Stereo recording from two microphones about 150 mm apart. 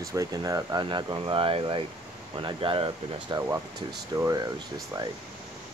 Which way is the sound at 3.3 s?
20° right (ahead or behind).